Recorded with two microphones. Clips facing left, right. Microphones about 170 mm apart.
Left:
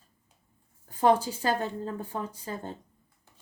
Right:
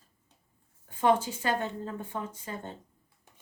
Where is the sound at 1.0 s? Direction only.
35° left (ahead or behind).